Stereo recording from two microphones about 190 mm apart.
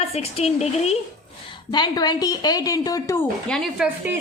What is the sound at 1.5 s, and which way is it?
A woman's voice, 25° left (ahead or behind).